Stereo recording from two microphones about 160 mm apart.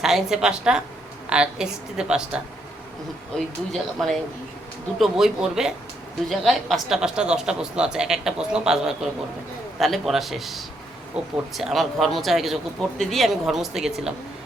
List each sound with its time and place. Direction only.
0.0 s a woman's voice: 5° right (ahead or behind)